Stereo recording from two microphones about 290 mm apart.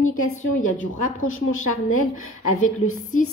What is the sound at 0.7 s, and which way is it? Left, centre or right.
Speech, left.